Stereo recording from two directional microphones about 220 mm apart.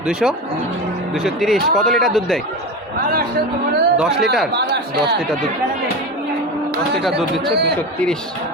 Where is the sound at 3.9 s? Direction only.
5° right (ahead or behind).